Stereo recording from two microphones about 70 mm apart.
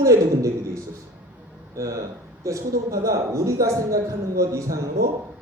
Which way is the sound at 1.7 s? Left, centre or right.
Right.